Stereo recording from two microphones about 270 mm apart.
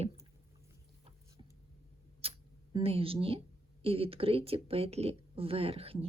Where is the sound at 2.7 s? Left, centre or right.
Right.